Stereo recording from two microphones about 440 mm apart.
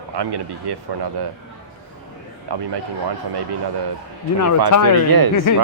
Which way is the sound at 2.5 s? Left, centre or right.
Right.